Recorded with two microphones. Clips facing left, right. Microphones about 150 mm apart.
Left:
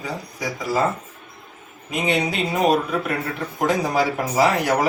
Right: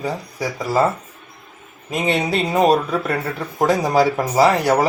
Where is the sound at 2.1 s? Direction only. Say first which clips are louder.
Right 3 dB; 35° right (ahead or behind).